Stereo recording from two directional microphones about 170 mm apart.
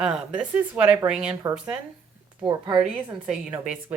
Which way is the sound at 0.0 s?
5° right (ahead or behind).